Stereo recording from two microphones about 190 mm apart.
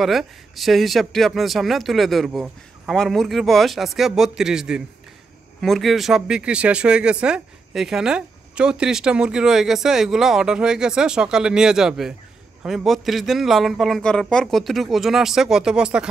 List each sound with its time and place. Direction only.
0.0 s speech: centre (ahead or behind)